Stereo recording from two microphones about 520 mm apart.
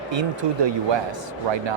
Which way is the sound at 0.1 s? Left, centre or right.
Right.